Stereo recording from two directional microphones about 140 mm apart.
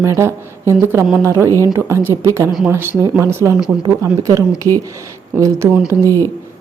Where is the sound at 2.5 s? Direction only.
Centre (ahead or behind).